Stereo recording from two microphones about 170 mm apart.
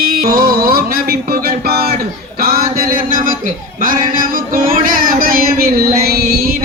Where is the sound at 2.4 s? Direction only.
60° right (ahead or behind).